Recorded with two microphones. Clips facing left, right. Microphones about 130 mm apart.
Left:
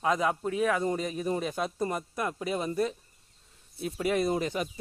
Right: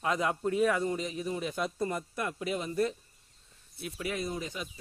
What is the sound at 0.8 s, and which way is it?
Speech, 45° left (ahead or behind).